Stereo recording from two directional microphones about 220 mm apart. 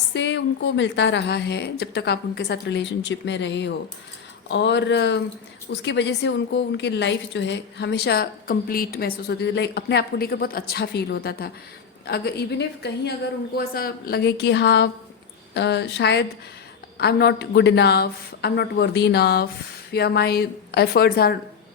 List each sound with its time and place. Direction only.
0.1 s a woman's voice: 55° left (ahead or behind)